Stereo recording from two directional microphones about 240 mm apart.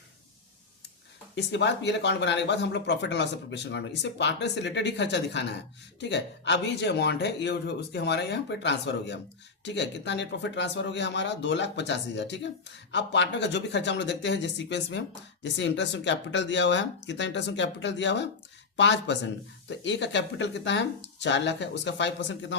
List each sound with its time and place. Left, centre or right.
1.4 s speech: left